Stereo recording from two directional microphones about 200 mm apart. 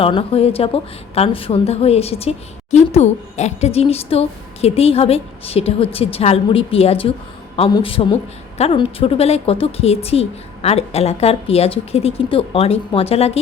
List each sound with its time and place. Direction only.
0.0 s a woman's voice: 30° left (ahead or behind)